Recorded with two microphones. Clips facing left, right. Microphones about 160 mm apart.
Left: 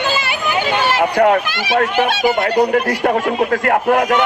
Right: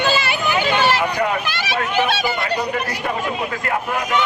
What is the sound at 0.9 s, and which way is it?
A man's voice, 55° left (ahead or behind).